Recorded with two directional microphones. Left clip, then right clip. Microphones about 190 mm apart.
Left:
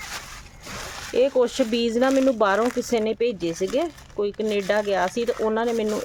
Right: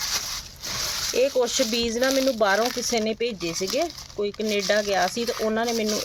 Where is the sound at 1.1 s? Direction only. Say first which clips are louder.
Left 3 dB; 35° left (ahead or behind).